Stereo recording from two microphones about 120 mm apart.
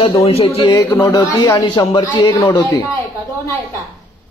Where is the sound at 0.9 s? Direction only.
30° left (ahead or behind); by 2.0 s 45° left (ahead or behind).